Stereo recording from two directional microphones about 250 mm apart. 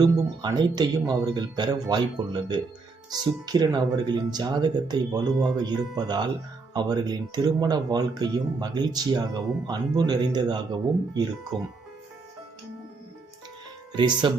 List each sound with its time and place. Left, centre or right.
0.0 s speech: centre
13.9 s speech: centre